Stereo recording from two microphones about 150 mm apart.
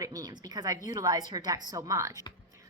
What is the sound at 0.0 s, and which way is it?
Speech, 25° right (ahead or behind).